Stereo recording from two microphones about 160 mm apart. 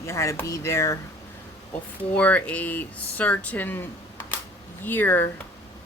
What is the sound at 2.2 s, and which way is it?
Speech, 10° left (ahead or behind).